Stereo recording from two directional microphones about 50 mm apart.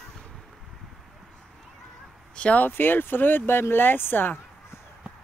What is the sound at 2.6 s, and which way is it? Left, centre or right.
Speech, left.